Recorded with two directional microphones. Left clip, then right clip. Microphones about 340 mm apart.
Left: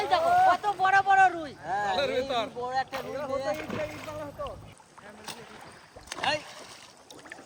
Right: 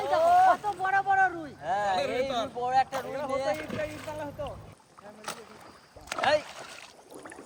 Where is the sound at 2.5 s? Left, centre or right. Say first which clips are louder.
Right 4 dB; right.